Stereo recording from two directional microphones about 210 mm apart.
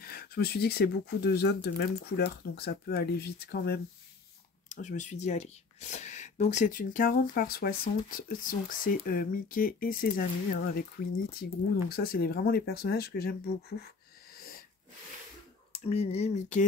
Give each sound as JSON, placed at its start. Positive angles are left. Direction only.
{"t": 0.0, "sound": "speech", "side_deg": 45}
{"t": 4.6, "sound": "speech", "side_deg": 35}
{"t": 11.9, "sound": "speech", "side_deg": 45}
{"t": 15.7, "sound": "speech", "side_deg": 30}